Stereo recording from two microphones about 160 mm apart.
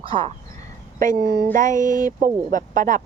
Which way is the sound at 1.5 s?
55° right (ahead or behind).